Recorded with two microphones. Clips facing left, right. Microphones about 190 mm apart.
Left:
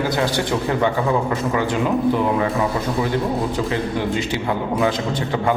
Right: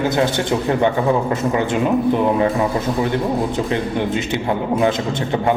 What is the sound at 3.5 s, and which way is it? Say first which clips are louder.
A man's voice: right 2 dB; 20° right (ahead or behind).